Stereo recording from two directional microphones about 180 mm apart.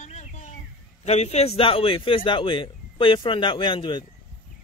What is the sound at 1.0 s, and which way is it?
A man's voice, 35° left (ahead or behind).